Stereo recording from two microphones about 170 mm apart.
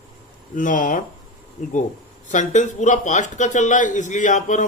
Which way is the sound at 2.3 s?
45° left (ahead or behind).